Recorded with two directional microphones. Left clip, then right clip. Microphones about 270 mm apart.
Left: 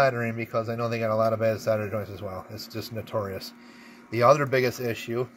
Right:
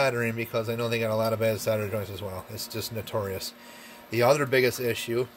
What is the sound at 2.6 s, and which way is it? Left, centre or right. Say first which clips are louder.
Speech: right 2 dB; right.